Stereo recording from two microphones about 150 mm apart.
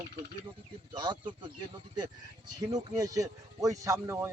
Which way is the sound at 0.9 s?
30° right (ahead or behind).